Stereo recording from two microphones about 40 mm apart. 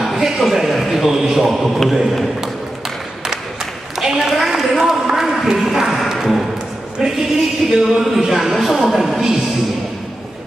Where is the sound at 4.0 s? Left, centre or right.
Centre.